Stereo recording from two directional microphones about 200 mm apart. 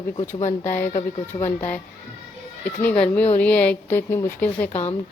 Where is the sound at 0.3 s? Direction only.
35° left (ahead or behind).